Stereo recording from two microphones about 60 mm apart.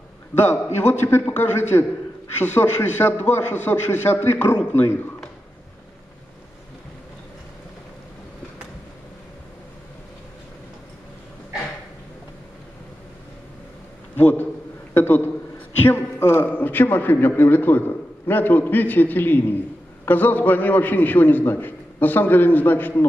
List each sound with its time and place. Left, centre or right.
0.3 s a man's voice: left
14.1 s a sound: left
15.0 s a man's voice: left